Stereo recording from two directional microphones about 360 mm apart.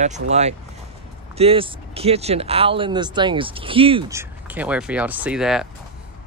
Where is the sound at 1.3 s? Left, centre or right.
Centre.